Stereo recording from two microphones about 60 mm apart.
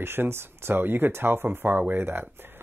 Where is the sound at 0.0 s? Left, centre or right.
Right.